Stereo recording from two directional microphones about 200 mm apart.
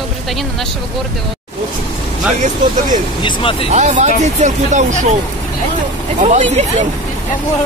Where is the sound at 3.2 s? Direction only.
25° left (ahead or behind).